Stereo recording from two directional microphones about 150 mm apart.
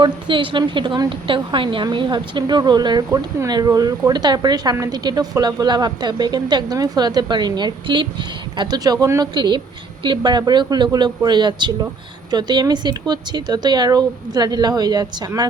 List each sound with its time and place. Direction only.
0.0 s a woman's voice: 35° right (ahead or behind)